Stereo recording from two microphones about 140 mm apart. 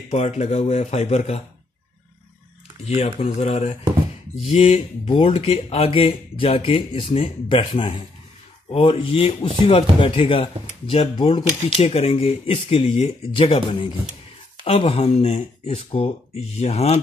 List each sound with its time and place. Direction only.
0.1 s speech: 55° left (ahead or behind)
2.9 s speech: 50° left (ahead or behind)